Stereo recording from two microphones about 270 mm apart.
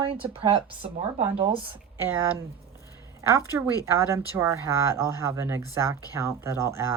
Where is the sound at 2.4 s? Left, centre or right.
Centre.